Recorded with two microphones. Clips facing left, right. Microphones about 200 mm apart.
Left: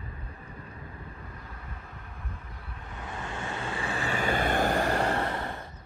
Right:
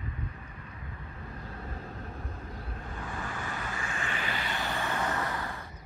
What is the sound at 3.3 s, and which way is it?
Vehicle, 25° left (ahead or behind).